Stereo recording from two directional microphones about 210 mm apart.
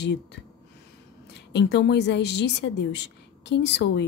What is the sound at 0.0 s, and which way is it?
Speech, 55° left (ahead or behind).